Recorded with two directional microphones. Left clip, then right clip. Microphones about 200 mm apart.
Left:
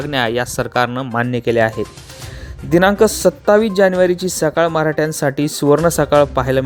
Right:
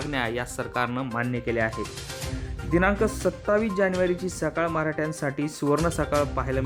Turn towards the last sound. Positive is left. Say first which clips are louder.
# left 12 dB
turn(degrees=35)  # may be behind; listen again after turning